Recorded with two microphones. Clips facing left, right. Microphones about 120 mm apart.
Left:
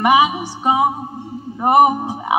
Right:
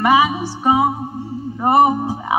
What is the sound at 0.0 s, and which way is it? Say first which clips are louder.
Music: left 1 dB; 15° left (ahead or behind).